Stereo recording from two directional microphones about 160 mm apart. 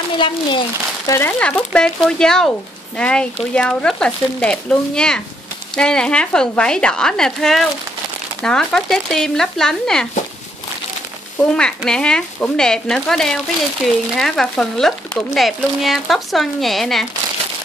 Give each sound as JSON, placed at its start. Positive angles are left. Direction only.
{"t": 0.2, "sound": "speech", "side_deg": 30}
{"t": 1.4, "sound": "speech", "side_deg": 5}
{"t": 11.5, "sound": "speech", "side_deg": 5}